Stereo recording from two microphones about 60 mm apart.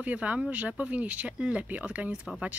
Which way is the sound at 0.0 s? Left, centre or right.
Right.